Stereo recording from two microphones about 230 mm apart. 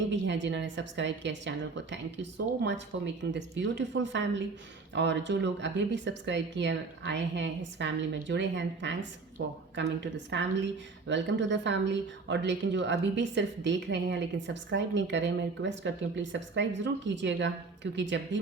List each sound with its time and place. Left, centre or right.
0.1 s speech: right
2.5 s speech: right
2.9 s speech: right